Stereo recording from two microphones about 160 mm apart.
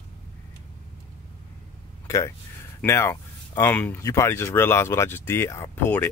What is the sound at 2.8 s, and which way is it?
Speech, 15° left (ahead or behind).